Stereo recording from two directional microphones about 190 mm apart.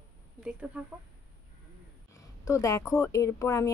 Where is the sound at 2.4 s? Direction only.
15° left (ahead or behind).